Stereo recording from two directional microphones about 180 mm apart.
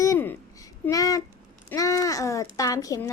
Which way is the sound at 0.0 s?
15° left (ahead or behind).